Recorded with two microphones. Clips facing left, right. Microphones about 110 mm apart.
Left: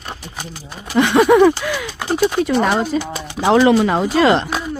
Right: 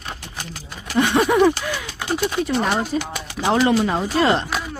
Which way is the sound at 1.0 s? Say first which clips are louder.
Left 5 dB; 90° left.